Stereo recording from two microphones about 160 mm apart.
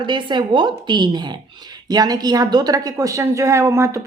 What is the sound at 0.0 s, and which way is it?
Speech, 30° right (ahead or behind).